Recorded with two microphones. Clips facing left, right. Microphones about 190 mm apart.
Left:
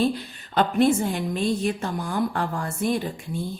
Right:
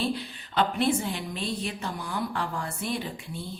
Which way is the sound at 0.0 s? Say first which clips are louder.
Left 6 dB; 45° left (ahead or behind).